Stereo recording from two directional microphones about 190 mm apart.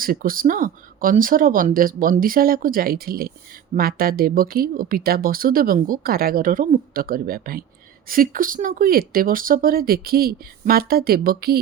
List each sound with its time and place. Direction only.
0.0 s speech: 50° right (ahead or behind)